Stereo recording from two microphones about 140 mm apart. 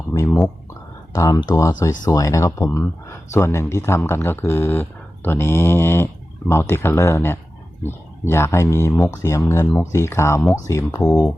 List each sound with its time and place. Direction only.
0.3 s a sound: 5° left (ahead or behind)
1.1 s speech: 25° left (ahead or behind)
11.0 s speech: 5° left (ahead or behind)